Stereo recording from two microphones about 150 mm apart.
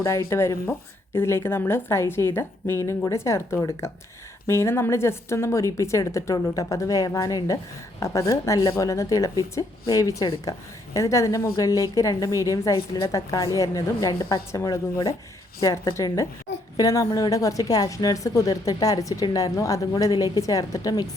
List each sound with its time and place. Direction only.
0.0 s a woman's voice: 15° left (ahead or behind)